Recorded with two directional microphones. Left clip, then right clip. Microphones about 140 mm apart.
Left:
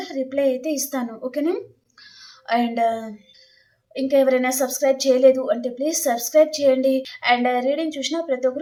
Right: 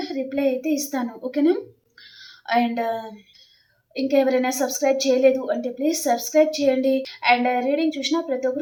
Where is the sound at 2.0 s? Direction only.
20° left (ahead or behind).